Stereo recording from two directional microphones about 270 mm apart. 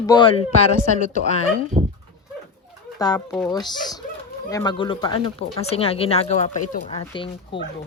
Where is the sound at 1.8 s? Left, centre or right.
Right.